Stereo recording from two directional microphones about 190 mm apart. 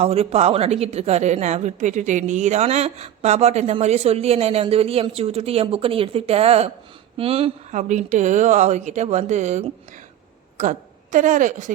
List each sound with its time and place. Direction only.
0.0 s a woman's voice: 30° right (ahead or behind)